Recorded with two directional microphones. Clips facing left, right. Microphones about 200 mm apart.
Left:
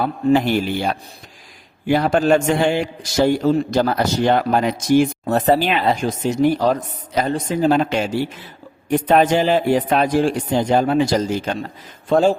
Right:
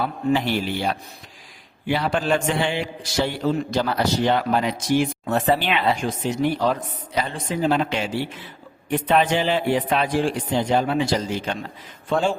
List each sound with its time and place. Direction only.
0.0 s a man's voice: 45° left (ahead or behind)